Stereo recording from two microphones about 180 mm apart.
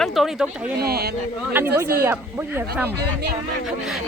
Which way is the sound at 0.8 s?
60° right (ahead or behind).